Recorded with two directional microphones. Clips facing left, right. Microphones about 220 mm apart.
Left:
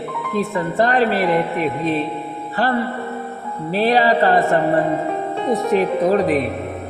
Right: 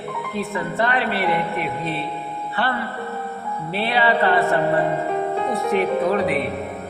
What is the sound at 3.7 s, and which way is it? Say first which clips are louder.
Music: left 5 dB; 40° left (ahead or behind).